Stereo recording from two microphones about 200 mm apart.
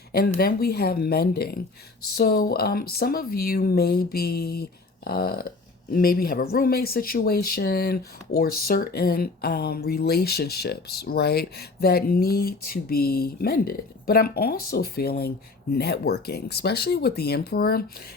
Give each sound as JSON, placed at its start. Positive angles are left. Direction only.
{"t": 0.1, "sound": "speech", "side_deg": 50}